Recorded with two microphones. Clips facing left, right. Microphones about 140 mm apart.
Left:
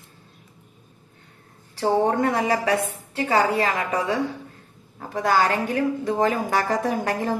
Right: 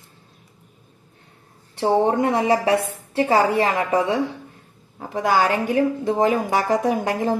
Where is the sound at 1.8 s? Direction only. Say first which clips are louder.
Right 2 dB; 20° right (ahead or behind).